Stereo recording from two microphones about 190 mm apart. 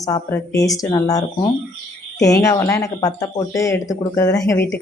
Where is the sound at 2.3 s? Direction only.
15° left (ahead or behind).